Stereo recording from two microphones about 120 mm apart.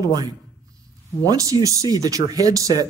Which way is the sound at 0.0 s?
35° right (ahead or behind).